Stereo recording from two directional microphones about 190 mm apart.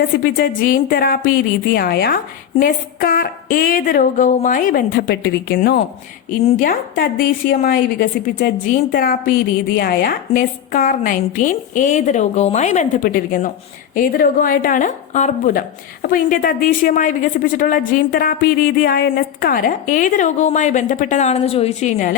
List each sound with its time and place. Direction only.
0.0 s a woman's voice: 50° left (ahead or behind)